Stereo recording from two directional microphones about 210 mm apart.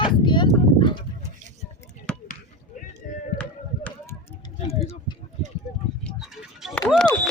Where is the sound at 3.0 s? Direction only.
40° left (ahead or behind).